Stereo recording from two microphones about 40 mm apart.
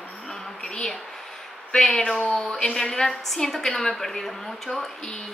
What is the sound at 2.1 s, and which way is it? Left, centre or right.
Speech, left.